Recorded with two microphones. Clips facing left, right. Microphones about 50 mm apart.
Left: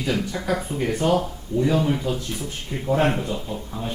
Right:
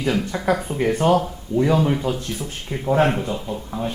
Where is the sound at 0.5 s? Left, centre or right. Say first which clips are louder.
Right 3 dB; right.